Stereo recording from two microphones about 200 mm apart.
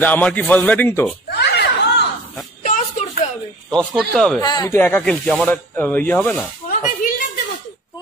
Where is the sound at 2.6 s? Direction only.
40° left (ahead or behind).